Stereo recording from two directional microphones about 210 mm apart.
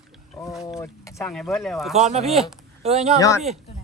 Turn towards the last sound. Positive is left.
turn(degrees=15)  # may be behind; listen again after turning